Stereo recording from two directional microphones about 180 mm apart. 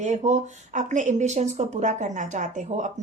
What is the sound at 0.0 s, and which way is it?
Speech, 40° right (ahead or behind).